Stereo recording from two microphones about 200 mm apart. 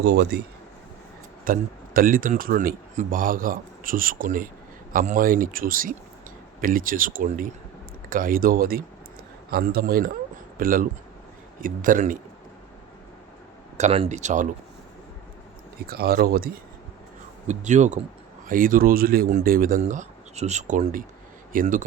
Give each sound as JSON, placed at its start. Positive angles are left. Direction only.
{"t": 0.0, "sound": "speech", "side_deg": -55}
{"t": 1.5, "sound": "speech", "side_deg": -45}
{"t": 13.7, "sound": "speech", "side_deg": -30}
{"t": 15.9, "sound": "speech", "side_deg": -50}
{"t": 17.4, "sound": "speech", "side_deg": -35}